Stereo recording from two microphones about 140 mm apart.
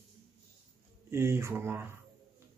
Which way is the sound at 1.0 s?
15° right (ahead or behind).